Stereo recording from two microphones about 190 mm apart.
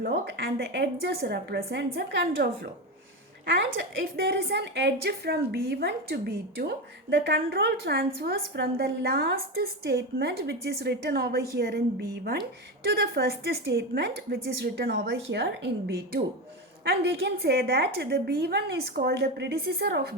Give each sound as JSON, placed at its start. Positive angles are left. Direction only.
{"t": 0.0, "sound": "a woman's voice", "side_deg": -55}
{"t": 3.5, "sound": "a woman's voice", "side_deg": -75}
{"t": 16.8, "sound": "a woman's voice", "side_deg": -60}